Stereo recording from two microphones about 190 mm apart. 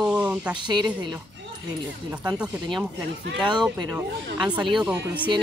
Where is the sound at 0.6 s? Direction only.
25° right (ahead or behind).